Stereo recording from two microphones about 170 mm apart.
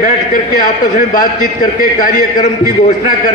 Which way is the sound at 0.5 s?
50° left (ahead or behind).